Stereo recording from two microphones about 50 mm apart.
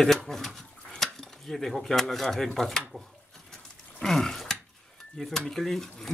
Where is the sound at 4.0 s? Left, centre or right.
Centre.